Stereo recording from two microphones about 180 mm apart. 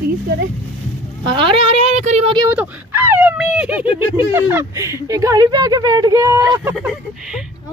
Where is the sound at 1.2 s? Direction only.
30° right (ahead or behind).